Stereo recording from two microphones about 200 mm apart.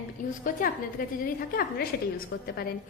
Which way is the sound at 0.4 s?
45° left (ahead or behind).